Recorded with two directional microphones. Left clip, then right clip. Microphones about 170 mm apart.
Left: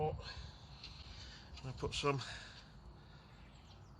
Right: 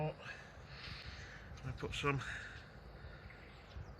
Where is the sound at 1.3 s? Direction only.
50° left (ahead or behind).